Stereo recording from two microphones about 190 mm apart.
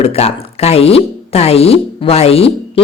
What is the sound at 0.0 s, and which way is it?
Speech, 30° left (ahead or behind).